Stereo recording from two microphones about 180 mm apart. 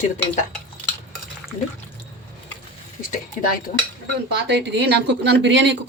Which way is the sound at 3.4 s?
50° left (ahead or behind).